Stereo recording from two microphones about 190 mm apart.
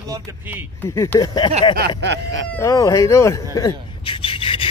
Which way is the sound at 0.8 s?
10° left (ahead or behind).